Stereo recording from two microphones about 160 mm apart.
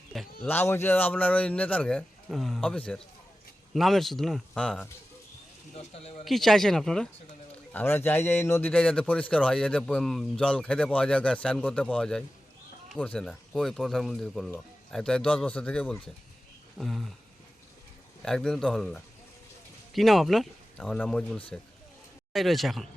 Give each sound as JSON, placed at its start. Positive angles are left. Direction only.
{"t": 0.4, "sound": "a man's voice", "side_deg": 15}
{"t": 5.7, "sound": "speech", "side_deg": 40}
{"t": 6.2, "sound": "a man's voice", "side_deg": 0}
{"t": 18.2, "sound": "speech", "side_deg": 5}